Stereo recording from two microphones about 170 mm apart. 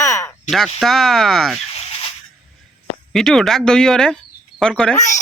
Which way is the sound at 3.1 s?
Centre (ahead or behind).